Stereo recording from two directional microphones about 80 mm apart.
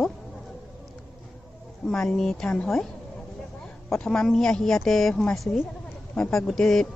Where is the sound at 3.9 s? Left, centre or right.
Centre.